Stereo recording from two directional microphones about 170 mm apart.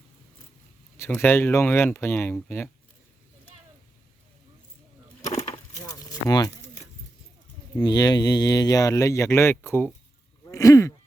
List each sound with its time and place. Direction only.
0.9 s speech: 15° left (ahead or behind)
5.7 s a sound: 20° left (ahead or behind)
7.9 s speech: 20° left (ahead or behind)